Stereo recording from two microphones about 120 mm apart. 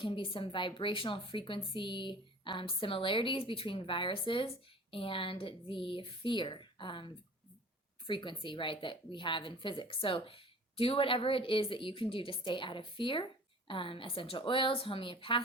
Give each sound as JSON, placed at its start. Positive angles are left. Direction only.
{"t": 0.0, "sound": "a woman's voice", "side_deg": 45}